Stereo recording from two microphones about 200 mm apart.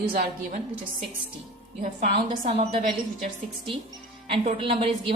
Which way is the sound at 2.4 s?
30° right (ahead or behind).